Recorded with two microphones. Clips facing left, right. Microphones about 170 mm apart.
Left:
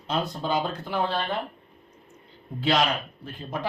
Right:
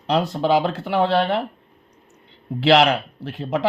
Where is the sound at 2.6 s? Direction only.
80° right.